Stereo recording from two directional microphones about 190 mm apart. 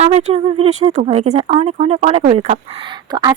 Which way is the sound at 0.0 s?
35° right (ahead or behind).